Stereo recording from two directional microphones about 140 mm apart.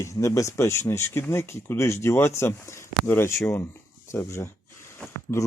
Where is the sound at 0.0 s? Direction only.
20° left (ahead or behind).